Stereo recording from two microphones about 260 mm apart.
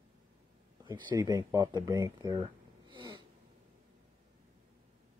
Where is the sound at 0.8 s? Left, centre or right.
Centre.